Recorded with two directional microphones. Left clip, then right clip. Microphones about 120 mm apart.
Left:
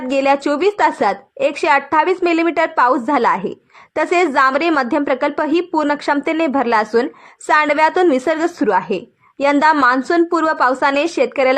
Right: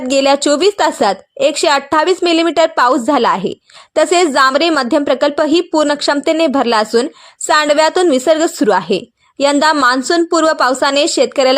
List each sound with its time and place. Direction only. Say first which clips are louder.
0.1 s speech: right 4 dB; 35° right (ahead or behind)